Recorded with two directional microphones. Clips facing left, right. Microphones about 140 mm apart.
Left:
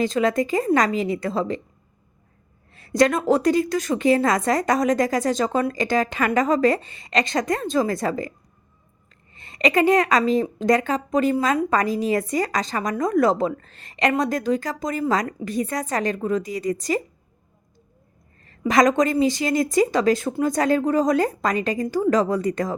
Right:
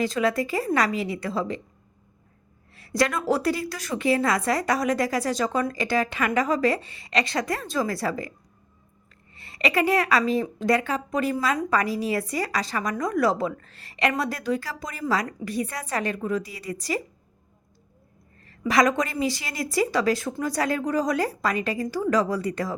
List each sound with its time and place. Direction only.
0.3 s a woman's voice: 30° left (ahead or behind)
3.7 s a woman's voice: 35° left (ahead or behind)
9.6 s a woman's voice: 40° left (ahead or behind)
18.6 s a woman's voice: 45° left (ahead or behind)